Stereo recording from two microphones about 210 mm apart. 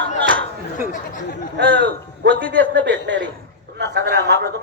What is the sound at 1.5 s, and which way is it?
Speech, 60° right (ahead or behind).